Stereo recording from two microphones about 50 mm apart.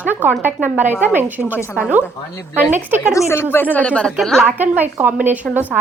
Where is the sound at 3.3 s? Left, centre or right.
Left.